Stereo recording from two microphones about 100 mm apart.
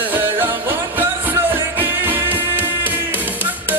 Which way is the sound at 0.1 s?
20° right (ahead or behind).